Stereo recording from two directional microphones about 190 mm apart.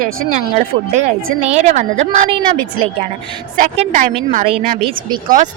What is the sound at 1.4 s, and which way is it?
Speech, 35° right (ahead or behind).